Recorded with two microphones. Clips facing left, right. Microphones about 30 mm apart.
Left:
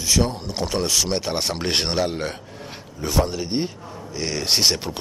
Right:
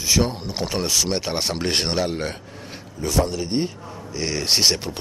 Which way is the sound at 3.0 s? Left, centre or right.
Centre.